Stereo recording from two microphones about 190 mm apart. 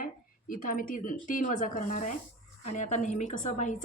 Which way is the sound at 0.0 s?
45° left (ahead or behind).